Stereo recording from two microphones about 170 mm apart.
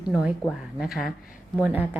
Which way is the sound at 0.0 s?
5° right (ahead or behind).